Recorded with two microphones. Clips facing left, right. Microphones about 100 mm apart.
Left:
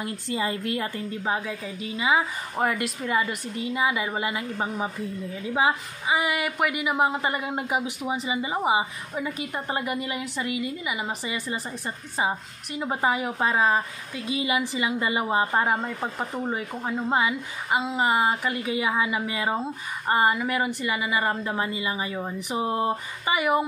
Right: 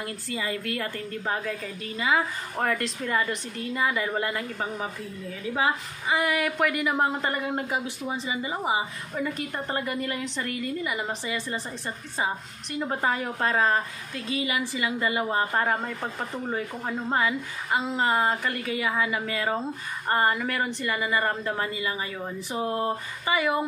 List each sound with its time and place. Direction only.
0.0 s a woman's voice: 25° left (ahead or behind); by 14.4 s 10° left (ahead or behind)
14.4 s a woman's voice: 20° left (ahead or behind)